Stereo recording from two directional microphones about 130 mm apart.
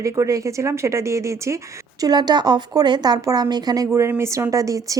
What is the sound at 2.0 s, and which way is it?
Speech, 35° right (ahead or behind).